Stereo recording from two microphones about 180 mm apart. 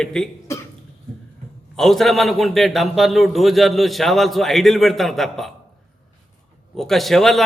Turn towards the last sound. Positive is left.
turn(degrees=0)  # may be behind; listen again after turning